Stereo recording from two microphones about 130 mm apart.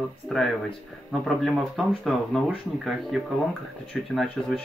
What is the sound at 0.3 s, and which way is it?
Speech, centre (ahead or behind).